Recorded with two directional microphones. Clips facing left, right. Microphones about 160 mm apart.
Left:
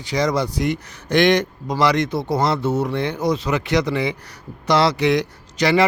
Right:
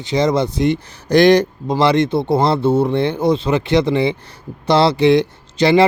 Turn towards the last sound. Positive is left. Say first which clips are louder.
# right 5 dB
turn(degrees=-25)  # may be behind; listen again after turning